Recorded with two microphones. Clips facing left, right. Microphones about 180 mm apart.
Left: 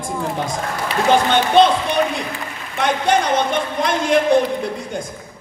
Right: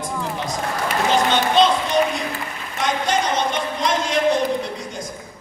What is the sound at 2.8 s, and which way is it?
Speech, 60° left (ahead or behind).